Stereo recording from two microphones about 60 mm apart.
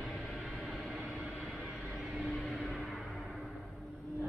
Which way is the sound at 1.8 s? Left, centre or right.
Centre.